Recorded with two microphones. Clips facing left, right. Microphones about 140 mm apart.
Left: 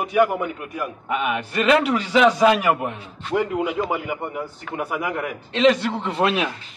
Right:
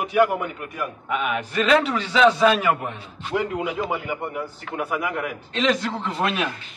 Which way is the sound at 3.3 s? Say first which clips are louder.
Left 3 dB; centre (ahead or behind).